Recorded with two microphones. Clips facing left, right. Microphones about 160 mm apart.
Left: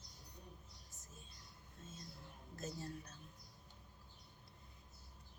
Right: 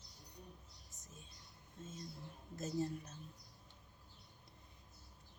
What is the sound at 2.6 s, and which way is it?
Speech, 20° right (ahead or behind).